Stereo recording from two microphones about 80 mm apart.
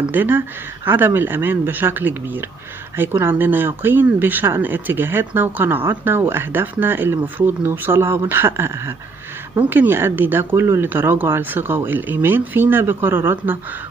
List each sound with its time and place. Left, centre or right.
0.1 s speech: right